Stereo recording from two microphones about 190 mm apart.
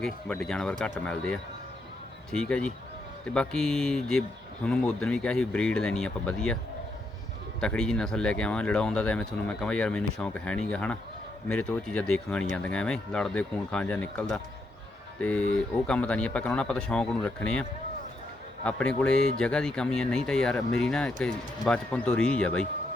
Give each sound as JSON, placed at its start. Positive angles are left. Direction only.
{"t": 0.0, "sound": "speech", "side_deg": 5}
{"t": 7.6, "sound": "speech", "side_deg": 5}